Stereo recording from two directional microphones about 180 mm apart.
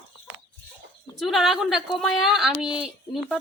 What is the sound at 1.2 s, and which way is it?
A woman's voice, centre (ahead or behind).